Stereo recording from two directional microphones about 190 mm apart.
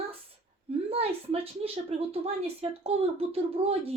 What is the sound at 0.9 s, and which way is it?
A woman's voice, 30° right (ahead or behind).